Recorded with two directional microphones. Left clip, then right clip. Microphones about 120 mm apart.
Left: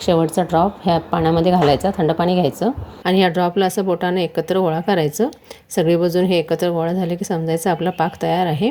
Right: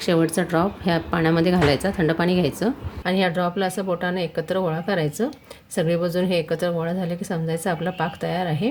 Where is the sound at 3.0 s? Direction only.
45° left (ahead or behind).